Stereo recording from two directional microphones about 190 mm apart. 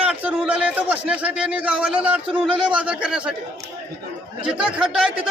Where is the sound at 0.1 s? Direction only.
5° right (ahead or behind).